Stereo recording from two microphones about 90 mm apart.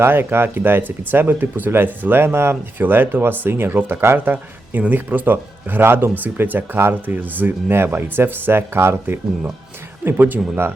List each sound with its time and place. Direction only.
0.0 s speech: 25° right (ahead or behind)